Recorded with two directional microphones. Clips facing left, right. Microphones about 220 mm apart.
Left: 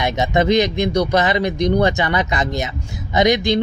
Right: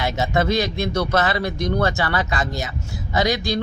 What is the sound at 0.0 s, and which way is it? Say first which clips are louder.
A man's voice: left 3 dB; 20° left (ahead or behind).